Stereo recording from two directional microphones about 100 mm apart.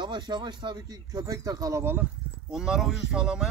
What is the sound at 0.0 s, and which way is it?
Speech, 50° right (ahead or behind).